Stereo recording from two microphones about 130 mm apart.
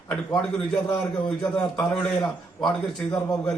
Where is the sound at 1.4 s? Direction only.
5° left (ahead or behind).